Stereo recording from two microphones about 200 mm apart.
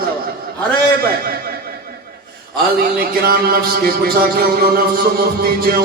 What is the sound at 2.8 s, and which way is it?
A man's voice, 50° right (ahead or behind).